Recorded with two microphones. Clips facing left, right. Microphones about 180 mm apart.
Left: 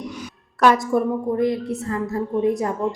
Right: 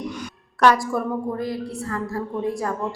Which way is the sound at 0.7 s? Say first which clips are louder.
Left 3 dB; 20° left (ahead or behind).